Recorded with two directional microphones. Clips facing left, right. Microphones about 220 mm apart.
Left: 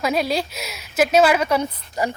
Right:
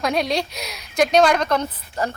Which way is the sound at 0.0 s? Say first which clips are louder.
Even; 5° left (ahead or behind).